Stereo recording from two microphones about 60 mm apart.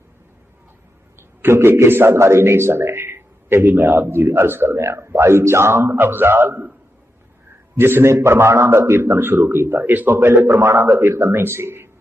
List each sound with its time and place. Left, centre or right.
1.4 s a man's voice: right
7.8 s a man's voice: right